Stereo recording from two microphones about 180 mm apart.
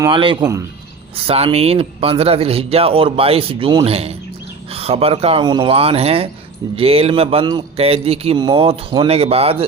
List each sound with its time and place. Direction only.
0.1 s speech: 30° right (ahead or behind)